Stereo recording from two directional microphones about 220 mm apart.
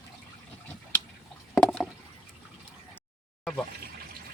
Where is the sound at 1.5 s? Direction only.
Centre (ahead or behind).